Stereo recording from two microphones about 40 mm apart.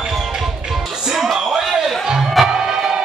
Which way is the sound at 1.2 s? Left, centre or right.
Centre.